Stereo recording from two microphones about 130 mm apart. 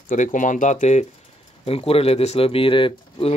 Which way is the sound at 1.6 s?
50° left (ahead or behind).